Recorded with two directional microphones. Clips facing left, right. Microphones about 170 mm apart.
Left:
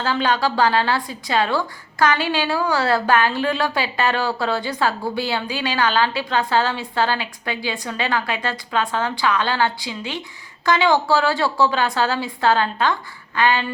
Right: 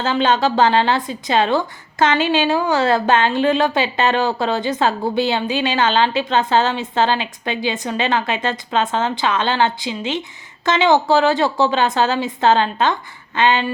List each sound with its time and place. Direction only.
0.0 s speech: 20° right (ahead or behind)